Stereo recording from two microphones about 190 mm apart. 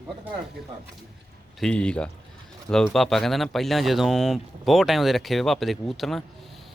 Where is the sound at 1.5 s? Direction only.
5° left (ahead or behind).